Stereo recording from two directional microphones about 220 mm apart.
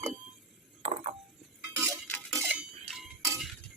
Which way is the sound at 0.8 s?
25° right (ahead or behind).